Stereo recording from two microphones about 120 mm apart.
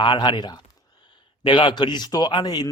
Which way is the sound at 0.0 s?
40° left (ahead or behind).